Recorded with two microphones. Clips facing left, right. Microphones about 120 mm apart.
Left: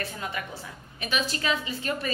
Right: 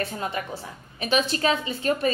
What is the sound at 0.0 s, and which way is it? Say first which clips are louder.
A woman's voice: right 5 dB; 30° right (ahead or behind).